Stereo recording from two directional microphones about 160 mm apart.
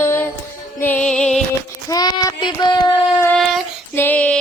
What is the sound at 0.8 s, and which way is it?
Music, 10° left (ahead or behind).